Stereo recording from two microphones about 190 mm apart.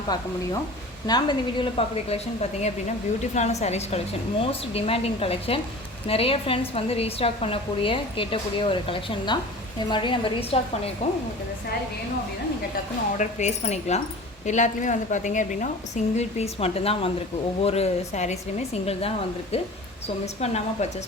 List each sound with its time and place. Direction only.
0.1 s a woman's voice: 20° left (ahead or behind)
12.7 s a woman's voice: 40° left (ahead or behind)